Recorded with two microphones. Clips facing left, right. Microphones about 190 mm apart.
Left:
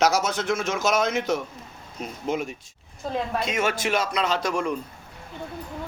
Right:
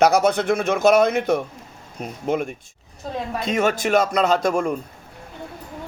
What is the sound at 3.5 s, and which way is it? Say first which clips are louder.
Speech: right 8 dB; 45° right (ahead or behind).